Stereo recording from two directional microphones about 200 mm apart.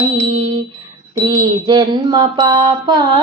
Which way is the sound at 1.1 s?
20° right (ahead or behind).